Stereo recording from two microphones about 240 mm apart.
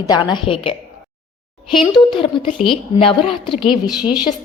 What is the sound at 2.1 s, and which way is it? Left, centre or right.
Speech, left.